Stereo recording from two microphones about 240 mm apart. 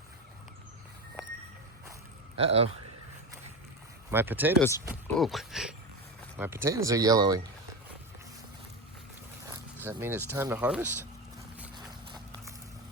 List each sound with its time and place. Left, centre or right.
2.3 s speech: right
4.1 s speech: centre
4.6 s speech: centre
5.2 s speech: centre
9.4 s speech: centre